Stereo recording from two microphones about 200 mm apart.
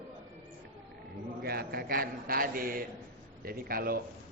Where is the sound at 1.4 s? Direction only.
50° right (ahead or behind).